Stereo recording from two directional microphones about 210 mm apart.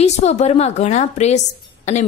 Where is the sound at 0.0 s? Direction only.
30° left (ahead or behind).